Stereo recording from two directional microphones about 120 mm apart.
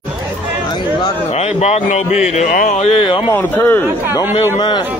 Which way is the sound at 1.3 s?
65° left (ahead or behind).